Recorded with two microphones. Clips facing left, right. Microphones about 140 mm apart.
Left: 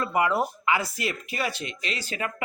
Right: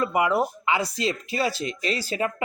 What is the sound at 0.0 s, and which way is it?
Speech, 20° right (ahead or behind).